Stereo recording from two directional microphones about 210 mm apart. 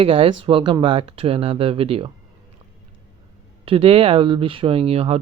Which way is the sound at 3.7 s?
25° right (ahead or behind).